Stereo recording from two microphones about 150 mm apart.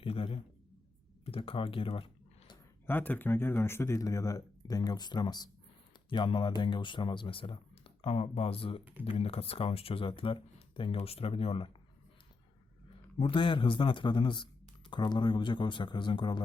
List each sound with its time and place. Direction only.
0.0 s a sound: 40° left (ahead or behind)
1.2 s speech: 40° left (ahead or behind)
2.8 s speech: 15° left (ahead or behind); by 11.8 s 40° left (ahead or behind)
13.1 s speech: 35° left (ahead or behind)